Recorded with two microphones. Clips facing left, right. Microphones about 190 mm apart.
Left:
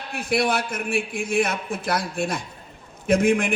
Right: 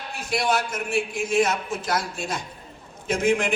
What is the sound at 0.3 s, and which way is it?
A man's voice, 60° left (ahead or behind).